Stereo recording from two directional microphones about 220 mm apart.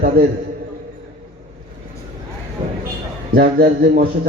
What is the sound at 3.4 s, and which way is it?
Speech, 45° right (ahead or behind).